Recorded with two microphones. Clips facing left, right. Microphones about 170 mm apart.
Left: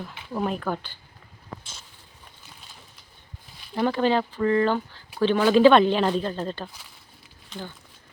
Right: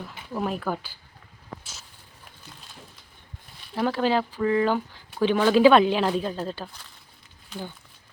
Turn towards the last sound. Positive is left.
turn(degrees=-5)  # may be behind; listen again after turning